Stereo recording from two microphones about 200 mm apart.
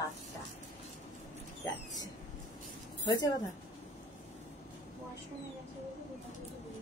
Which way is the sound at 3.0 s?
20° left (ahead or behind).